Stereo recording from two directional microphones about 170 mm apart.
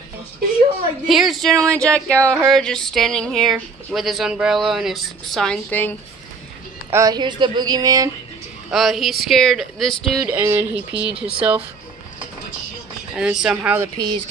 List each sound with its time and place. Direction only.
1.0 s speech: centre (ahead or behind)
6.9 s a woman's voice: 20° right (ahead or behind)
8.6 s speech: centre (ahead or behind)
10.2 s speech: 10° right (ahead or behind)
13.1 s speech: 5° right (ahead or behind)
13.9 s a woman's voice: 25° right (ahead or behind)